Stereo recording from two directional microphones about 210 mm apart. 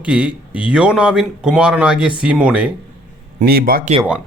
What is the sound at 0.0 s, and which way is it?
Speech, 5° right (ahead or behind).